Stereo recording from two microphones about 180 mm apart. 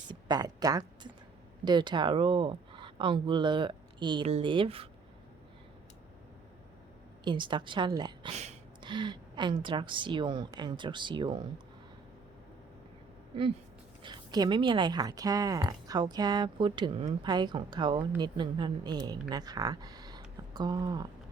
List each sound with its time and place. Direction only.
0.1 s a sound: 20° right (ahead or behind)
1.6 s speech: 25° right (ahead or behind)
7.3 s speech: 25° right (ahead or behind)
14.0 s speech: 25° right (ahead or behind)